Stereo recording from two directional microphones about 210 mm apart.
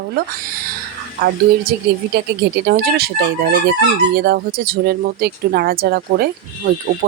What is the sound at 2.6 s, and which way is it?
Speech, 45° right (ahead or behind).